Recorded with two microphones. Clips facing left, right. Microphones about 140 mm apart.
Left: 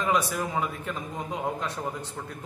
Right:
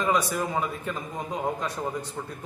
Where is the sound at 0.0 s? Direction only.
Centre (ahead or behind).